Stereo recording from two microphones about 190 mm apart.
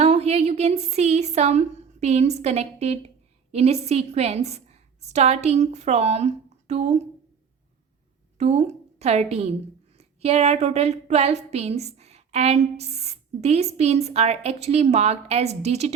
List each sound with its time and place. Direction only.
0.0 s a sound: 35° right (ahead or behind)
3.5 s a woman's voice: 35° right (ahead or behind)
8.4 s a woman's voice: 35° right (ahead or behind)